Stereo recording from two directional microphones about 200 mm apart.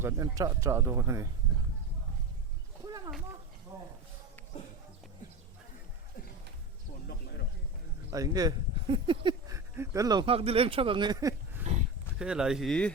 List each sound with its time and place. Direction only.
0.0 s speech: 15° right (ahead or behind)
2.8 s a sound: 20° right (ahead or behind)
3.7 s speech: 15° right (ahead or behind)
7.1 s snake: 50° left (ahead or behind)
8.1 s speech: 15° right (ahead or behind)
12.2 s speech: 5° right (ahead or behind)